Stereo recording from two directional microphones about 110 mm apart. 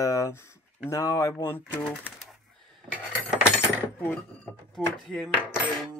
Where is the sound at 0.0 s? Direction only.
30° left (ahead or behind).